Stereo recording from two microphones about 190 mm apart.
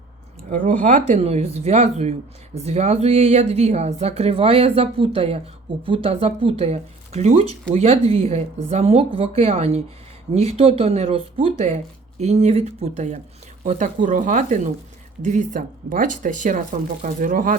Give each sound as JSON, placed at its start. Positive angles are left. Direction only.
{"t": 0.5, "sound": "speech", "side_deg": -45}